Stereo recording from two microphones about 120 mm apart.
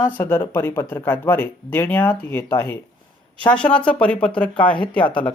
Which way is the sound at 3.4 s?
10° left (ahead or behind).